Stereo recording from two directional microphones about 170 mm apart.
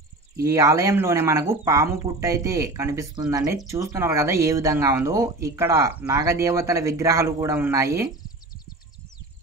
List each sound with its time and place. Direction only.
0.4 s speech: 20° right (ahead or behind)